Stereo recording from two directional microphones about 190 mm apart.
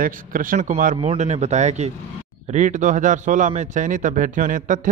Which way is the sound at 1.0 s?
35° right (ahead or behind).